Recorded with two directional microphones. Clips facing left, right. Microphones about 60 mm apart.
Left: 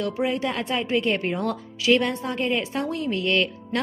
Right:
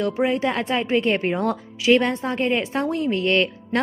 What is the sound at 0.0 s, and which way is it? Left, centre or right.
A woman's voice, right.